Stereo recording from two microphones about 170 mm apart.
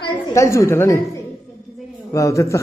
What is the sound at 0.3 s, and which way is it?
Speech, 15° left (ahead or behind).